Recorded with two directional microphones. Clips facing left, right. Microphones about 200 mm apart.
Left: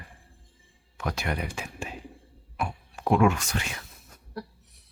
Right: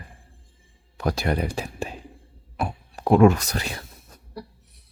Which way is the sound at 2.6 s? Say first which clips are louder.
Right 3 dB; 35° right (ahead or behind).